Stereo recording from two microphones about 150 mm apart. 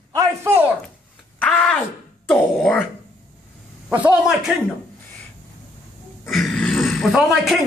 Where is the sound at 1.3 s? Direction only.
5° left (ahead or behind).